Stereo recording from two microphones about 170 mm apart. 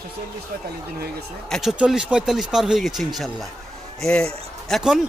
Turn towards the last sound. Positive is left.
turn(degrees=-5)  # may be behind; listen again after turning